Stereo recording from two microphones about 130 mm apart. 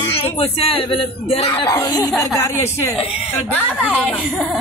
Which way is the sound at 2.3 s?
20° left (ahead or behind).